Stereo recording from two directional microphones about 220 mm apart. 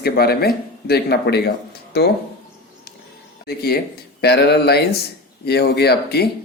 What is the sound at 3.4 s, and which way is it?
Speech, 45° left (ahead or behind).